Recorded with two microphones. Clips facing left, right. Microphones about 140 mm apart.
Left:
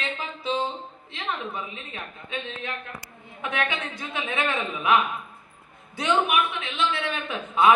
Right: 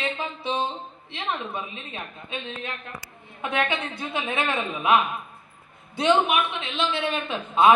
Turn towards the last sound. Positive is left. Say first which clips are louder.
# right 2 dB
turn(degrees=-25)  # may be behind; listen again after turning